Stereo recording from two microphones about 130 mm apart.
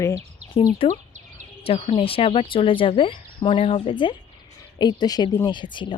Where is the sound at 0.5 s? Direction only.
45° left (ahead or behind).